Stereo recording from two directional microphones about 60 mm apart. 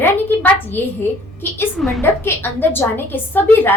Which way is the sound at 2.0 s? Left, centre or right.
Left.